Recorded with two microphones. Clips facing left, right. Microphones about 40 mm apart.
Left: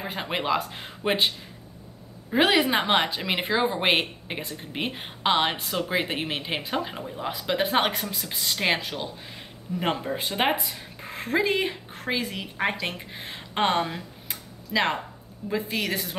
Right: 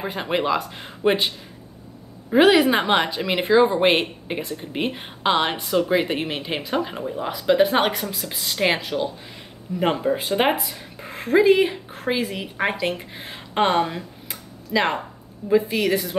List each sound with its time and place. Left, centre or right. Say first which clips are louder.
0.1 s speech: right 3 dB; centre
2.3 s speech: right 6 dB; centre